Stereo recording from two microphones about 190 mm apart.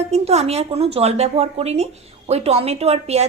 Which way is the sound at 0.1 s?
35° right (ahead or behind).